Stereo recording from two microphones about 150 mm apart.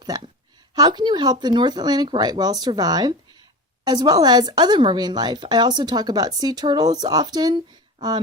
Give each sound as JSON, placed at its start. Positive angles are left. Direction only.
{"t": 0.7, "sound": "speech", "side_deg": -30}